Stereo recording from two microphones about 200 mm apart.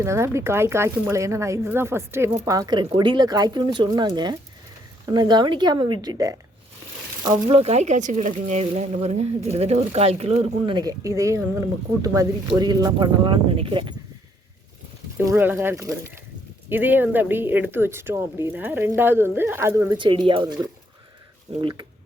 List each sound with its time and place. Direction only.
0.0 s speech: 15° right (ahead or behind); by 10.8 s 30° right (ahead or behind)
10.8 s speech: 15° right (ahead or behind)
15.2 s speech: 10° right (ahead or behind)
20.0 s speech: 25° right (ahead or behind)
21.6 s speech: 25° right (ahead or behind)